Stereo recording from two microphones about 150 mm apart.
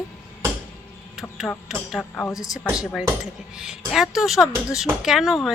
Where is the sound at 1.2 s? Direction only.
Centre (ahead or behind).